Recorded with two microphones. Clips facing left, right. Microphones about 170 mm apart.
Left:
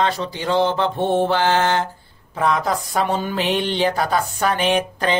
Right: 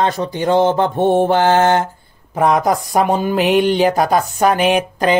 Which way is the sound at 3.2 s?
10° right (ahead or behind).